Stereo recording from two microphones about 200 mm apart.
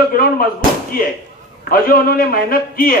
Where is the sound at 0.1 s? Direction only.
45° left (ahead or behind).